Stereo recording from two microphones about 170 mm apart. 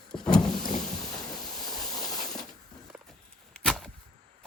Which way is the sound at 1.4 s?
25° left (ahead or behind).